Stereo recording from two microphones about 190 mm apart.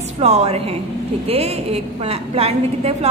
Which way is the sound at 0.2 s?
35° right (ahead or behind).